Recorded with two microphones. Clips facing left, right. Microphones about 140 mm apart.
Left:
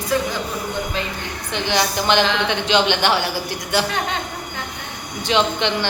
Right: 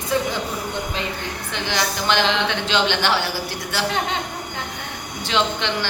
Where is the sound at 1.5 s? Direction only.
20° left (ahead or behind).